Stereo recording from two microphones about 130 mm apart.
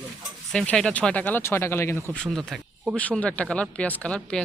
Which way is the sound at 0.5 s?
5° left (ahead or behind).